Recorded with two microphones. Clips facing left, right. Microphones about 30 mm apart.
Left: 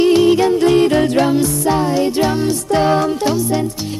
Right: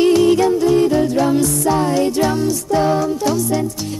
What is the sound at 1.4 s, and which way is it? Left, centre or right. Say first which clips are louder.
Music: left 1 dB; left.